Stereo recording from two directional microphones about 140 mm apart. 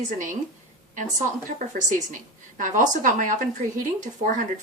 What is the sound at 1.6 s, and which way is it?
Speech, 65° right (ahead or behind).